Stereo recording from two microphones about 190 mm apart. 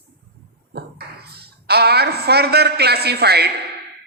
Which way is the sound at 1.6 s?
55° right (ahead or behind).